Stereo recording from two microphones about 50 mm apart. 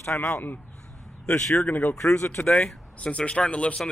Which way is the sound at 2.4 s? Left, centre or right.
Centre.